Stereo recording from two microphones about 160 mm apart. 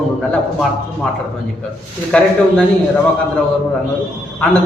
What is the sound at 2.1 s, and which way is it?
Speech, 5° left (ahead or behind).